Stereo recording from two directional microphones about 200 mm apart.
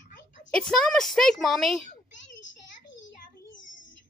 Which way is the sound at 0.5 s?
5° left (ahead or behind).